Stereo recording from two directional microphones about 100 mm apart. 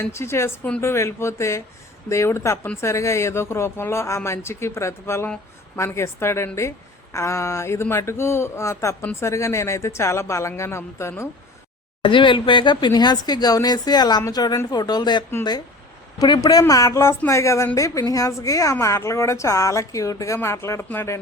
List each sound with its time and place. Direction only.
0.0 s a woman's voice: 25° left (ahead or behind)
12.0 s a woman's voice: 55° left (ahead or behind); by 21.2 s 25° left (ahead or behind)